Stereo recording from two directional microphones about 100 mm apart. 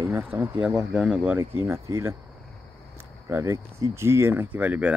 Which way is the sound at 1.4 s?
25° right (ahead or behind).